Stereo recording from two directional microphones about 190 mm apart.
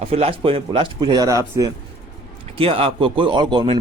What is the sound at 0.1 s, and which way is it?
Speech, 30° right (ahead or behind).